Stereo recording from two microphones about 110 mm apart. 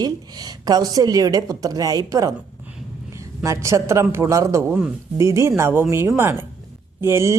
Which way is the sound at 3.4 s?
25° right (ahead or behind).